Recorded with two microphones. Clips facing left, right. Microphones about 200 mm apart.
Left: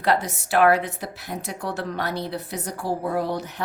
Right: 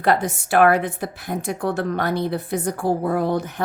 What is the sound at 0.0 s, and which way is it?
A woman's voice, 50° right (ahead or behind).